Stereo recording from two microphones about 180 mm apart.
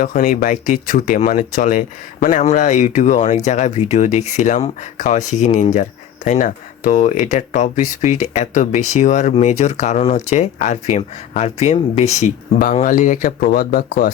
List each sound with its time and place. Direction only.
0.0 s speech: 50° left (ahead or behind)